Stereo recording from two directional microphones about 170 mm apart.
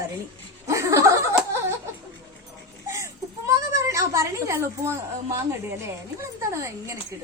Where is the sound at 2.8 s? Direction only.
15° right (ahead or behind).